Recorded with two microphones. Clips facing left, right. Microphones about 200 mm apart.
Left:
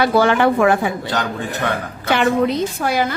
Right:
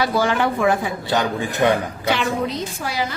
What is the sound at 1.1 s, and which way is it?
Speech, 10° right (ahead or behind).